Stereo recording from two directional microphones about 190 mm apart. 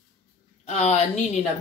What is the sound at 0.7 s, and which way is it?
Speech, 35° left (ahead or behind).